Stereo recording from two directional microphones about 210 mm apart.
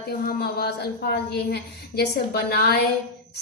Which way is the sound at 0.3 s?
45° left (ahead or behind).